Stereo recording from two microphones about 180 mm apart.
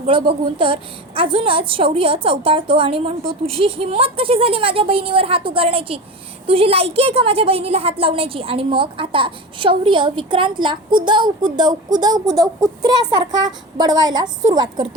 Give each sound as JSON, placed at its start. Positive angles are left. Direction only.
{"t": 0.0, "sound": "a woman's voice", "side_deg": -30}